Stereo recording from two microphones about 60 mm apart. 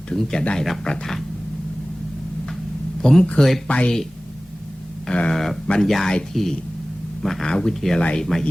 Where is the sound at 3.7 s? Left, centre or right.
Centre.